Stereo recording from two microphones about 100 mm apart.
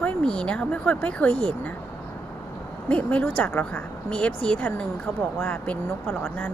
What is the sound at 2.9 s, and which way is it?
Speech, 15° left (ahead or behind).